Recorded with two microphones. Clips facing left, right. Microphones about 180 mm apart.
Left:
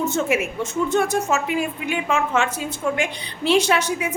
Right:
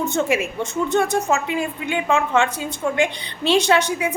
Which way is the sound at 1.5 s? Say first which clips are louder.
Even; 25° right (ahead or behind).